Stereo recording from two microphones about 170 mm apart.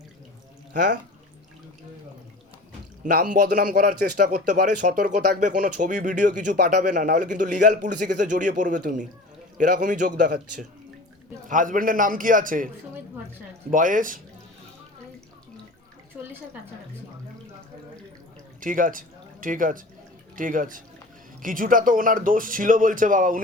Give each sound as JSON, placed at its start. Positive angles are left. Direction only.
{"t": 0.7, "sound": "speech", "side_deg": -50}
{"t": 3.0, "sound": "speech", "side_deg": -50}
{"t": 18.6, "sound": "speech", "side_deg": -50}